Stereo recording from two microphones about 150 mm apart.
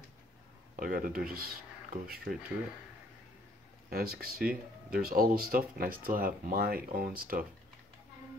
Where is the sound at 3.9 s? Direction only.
90° right.